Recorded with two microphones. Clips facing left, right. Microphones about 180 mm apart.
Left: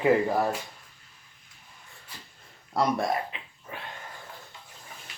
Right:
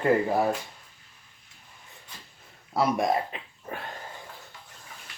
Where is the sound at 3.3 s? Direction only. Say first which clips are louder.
Right 4 dB; 40° right (ahead or behind).